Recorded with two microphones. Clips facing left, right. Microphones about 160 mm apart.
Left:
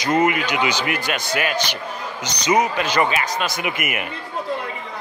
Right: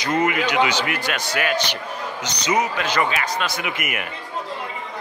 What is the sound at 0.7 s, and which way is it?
Speech, 30° right (ahead or behind).